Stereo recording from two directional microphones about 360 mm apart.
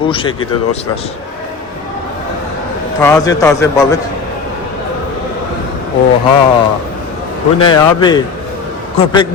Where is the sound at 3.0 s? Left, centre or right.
Centre.